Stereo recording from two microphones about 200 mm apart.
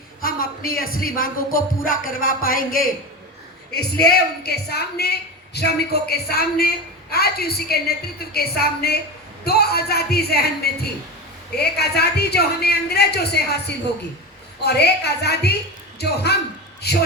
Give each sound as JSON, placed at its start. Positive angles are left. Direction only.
{"t": 0.2, "sound": "a woman's voice", "side_deg": 45}